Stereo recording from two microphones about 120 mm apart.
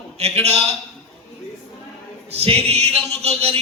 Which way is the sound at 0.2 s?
60° right (ahead or behind).